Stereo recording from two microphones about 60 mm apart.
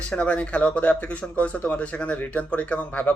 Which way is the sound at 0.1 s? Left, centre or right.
Centre.